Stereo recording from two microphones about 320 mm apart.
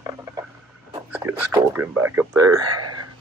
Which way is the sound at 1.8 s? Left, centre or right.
Centre.